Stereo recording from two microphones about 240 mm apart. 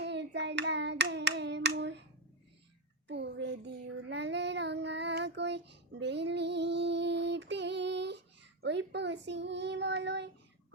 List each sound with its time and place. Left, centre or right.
0.0 s hands: right
3.1 s child singing: right